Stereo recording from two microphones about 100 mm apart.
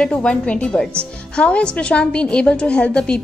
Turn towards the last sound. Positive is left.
turn(degrees=10)  # may be behind; listen again after turning